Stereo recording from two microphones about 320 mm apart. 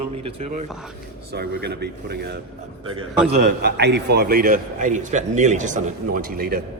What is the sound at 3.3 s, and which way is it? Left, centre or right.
A man's voice, right.